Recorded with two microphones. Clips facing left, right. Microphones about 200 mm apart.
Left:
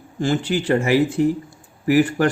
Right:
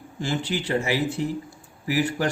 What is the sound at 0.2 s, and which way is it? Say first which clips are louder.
Speech: left 6 dB; 50° left (ahead or behind).